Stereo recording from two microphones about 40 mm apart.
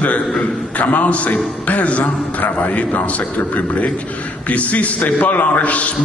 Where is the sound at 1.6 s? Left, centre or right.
Left.